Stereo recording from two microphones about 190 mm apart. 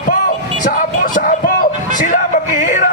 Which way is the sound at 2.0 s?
45° left (ahead or behind).